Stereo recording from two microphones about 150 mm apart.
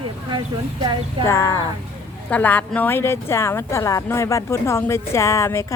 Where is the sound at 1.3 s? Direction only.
20° left (ahead or behind).